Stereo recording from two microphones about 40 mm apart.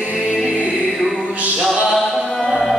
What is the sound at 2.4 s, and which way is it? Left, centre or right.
Music, left.